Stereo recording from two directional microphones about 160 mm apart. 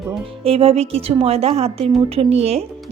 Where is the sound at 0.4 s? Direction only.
40° right (ahead or behind).